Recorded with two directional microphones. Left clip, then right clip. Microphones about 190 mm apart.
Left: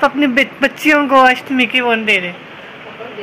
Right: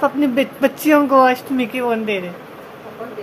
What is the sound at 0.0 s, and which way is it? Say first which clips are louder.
Speech: left 4 dB; 5° right (ahead or behind).